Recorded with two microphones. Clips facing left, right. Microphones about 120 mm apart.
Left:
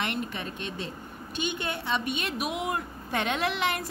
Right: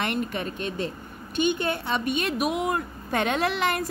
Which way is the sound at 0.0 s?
50° right (ahead or behind).